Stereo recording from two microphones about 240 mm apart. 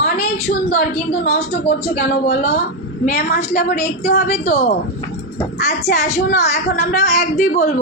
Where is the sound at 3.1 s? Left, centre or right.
Left.